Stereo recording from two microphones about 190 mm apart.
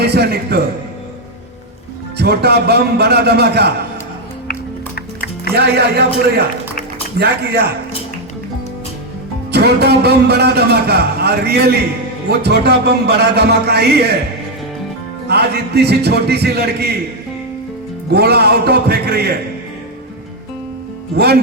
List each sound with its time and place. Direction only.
0.0 s a man's voice: 60° right (ahead or behind)
2.1 s speech: 55° right (ahead or behind)
5.5 s speech: 60° right (ahead or behind)
9.5 s speech: 60° right (ahead or behind)
15.3 s speech: 60° right (ahead or behind)
18.1 s speech: 55° right (ahead or behind)
21.2 s speech: 55° right (ahead or behind)